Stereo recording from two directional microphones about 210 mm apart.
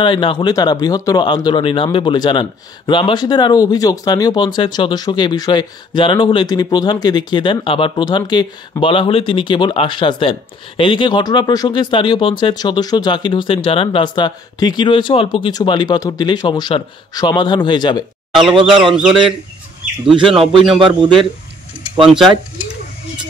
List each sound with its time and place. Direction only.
0.0 s speech: 25° left (ahead or behind)
18.3 s a man's voice: centre (ahead or behind)
20.8 s a man's voice: 25° right (ahead or behind)
22.0 s a man's voice: centre (ahead or behind)